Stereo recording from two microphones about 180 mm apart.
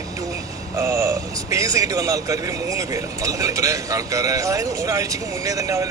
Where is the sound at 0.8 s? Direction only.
15° right (ahead or behind).